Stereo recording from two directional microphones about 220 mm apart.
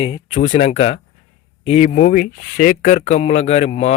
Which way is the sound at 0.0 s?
35° left (ahead or behind).